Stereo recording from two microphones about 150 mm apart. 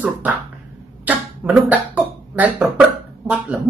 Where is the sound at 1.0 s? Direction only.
10° right (ahead or behind).